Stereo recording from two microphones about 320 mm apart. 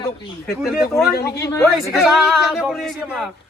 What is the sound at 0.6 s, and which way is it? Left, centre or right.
Speech, centre.